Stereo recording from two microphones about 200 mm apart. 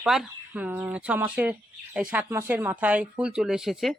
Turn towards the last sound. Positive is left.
turn(degrees=0)  # may be behind; listen again after turning